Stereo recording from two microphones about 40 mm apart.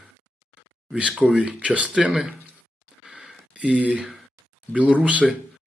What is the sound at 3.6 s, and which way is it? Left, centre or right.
Speech, right.